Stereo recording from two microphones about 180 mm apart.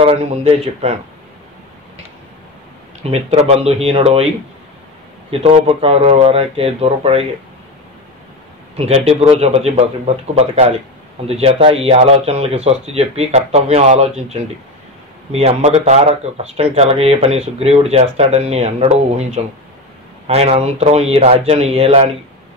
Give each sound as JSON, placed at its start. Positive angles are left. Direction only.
{"t": 0.0, "sound": "speech", "side_deg": -35}
{"t": 3.0, "sound": "speech", "side_deg": -35}
{"t": 5.3, "sound": "speech", "side_deg": -30}
{"t": 8.7, "sound": "speech", "side_deg": -35}